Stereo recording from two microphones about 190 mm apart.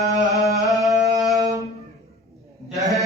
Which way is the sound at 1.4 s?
20° right (ahead or behind).